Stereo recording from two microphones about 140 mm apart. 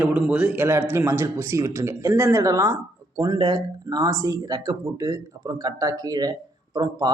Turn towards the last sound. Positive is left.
turn(degrees=-30)  # may be behind; listen again after turning